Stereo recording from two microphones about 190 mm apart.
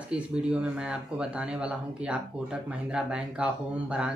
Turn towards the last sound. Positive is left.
turn(degrees=-5)  # may be behind; listen again after turning